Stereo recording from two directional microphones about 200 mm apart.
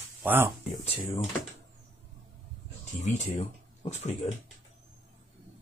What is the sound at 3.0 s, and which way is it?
Speech, 35° left (ahead or behind).